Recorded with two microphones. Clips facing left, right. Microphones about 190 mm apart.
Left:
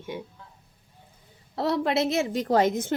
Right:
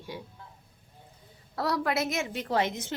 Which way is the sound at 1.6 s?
25° left (ahead or behind).